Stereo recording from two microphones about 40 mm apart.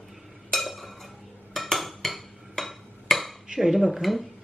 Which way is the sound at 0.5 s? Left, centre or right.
Centre.